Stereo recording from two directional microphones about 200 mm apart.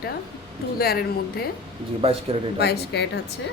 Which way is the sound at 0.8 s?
50° left (ahead or behind).